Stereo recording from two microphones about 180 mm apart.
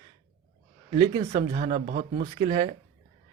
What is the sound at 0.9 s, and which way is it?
A man's voice, 35° right (ahead or behind).